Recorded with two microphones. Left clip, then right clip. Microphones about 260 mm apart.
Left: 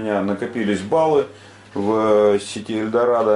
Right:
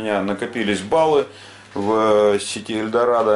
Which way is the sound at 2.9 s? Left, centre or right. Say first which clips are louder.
Even; centre.